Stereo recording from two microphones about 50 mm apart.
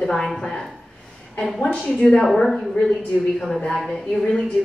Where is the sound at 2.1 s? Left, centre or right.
Centre.